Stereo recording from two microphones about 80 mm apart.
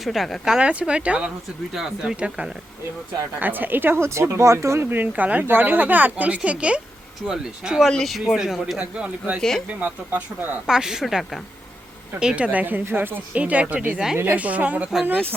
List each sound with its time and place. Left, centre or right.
0.0 s speech: centre; by 4.9 s right
4.9 s speech: right
7.9 s speech: centre
8.8 s speech: centre
9.4 s speech: centre
9.8 s speech: centre
10.7 s speech: centre
12.2 s speech: centre